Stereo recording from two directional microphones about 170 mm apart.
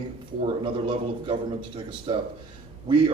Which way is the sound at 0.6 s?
30° right (ahead or behind).